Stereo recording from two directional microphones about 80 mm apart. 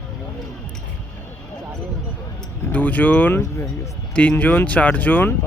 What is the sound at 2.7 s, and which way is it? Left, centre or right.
Speech, left.